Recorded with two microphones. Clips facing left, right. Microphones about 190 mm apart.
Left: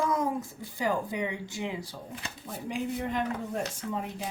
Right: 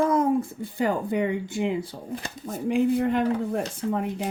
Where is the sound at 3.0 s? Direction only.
60° right (ahead or behind).